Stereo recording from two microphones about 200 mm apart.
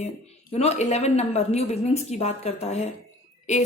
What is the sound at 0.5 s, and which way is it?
A woman's voice, 35° left (ahead or behind).